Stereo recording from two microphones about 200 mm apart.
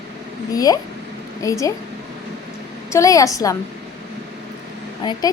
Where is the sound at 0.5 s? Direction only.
20° left (ahead or behind).